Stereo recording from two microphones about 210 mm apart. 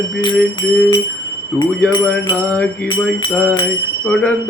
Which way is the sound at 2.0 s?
5° left (ahead or behind).